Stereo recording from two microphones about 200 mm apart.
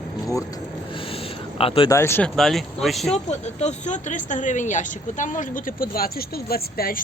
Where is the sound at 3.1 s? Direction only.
35° left (ahead or behind).